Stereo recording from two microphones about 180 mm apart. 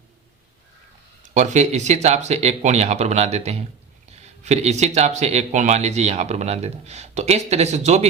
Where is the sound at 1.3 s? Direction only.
40° right (ahead or behind).